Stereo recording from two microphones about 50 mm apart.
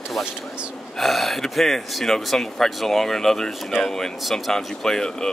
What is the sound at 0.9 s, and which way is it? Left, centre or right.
Speech, centre.